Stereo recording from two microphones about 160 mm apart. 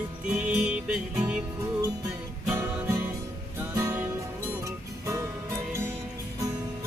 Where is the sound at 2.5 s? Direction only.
15° right (ahead or behind).